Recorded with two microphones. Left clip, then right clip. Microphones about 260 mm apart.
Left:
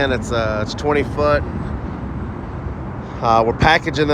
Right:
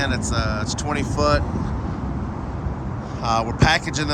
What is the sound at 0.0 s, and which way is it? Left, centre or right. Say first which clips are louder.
Speech: left 5 dB; centre.